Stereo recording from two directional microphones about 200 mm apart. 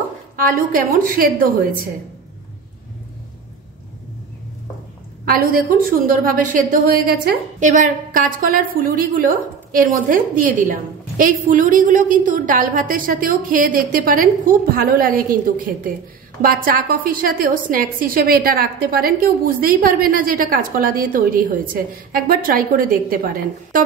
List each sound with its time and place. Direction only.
0.4 s a woman's voice: 45° right (ahead or behind)
5.2 s a woman's voice: 45° right (ahead or behind)